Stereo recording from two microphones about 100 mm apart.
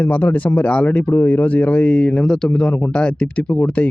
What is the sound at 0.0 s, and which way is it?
Speech, 20° left (ahead or behind).